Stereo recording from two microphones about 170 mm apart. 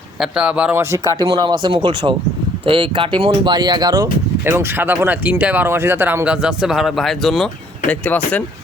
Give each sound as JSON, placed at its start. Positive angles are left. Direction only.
{"t": 0.2, "sound": "speech", "side_deg": -5}